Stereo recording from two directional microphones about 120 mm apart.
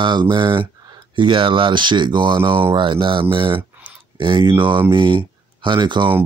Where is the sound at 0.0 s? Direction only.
40° right (ahead or behind).